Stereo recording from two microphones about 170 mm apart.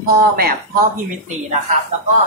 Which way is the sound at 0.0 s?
60° right (ahead or behind).